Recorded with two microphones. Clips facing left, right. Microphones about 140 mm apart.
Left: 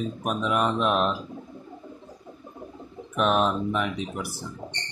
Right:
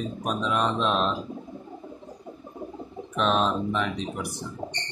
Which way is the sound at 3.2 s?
5° left (ahead or behind).